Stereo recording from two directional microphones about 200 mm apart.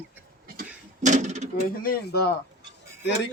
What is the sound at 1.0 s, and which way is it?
Speech, 35° right (ahead or behind).